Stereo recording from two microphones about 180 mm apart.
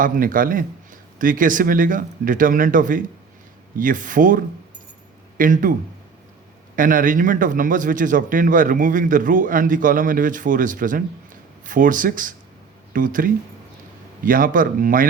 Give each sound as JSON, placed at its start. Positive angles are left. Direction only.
{"t": 0.0, "sound": "a man's voice", "side_deg": -50}
{"t": 6.7, "sound": "a man's voice", "side_deg": -50}